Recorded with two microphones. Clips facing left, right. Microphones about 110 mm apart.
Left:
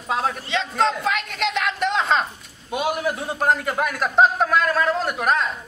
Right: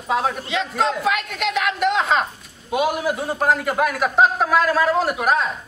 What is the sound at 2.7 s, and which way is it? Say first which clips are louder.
A man's voice: right 3 dB; centre (ahead or behind).